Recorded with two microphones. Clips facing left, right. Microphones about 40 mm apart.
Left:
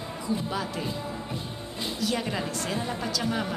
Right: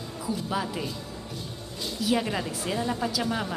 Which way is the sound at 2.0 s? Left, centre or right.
Centre.